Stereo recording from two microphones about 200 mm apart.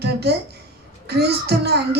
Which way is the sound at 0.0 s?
55° right (ahead or behind).